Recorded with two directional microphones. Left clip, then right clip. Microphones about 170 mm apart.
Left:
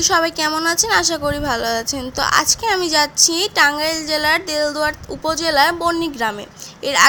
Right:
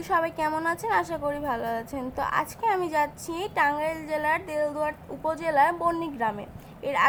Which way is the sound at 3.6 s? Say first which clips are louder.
Left 8 dB; 30° left (ahead or behind).